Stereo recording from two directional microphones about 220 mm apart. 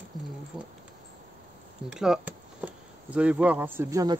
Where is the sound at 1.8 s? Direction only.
5° right (ahead or behind).